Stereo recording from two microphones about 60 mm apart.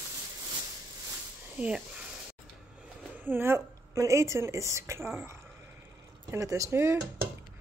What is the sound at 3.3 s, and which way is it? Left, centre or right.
A woman's voice, right.